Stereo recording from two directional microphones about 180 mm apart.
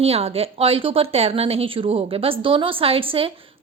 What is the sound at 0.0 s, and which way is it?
A woman's voice, 35° right (ahead or behind).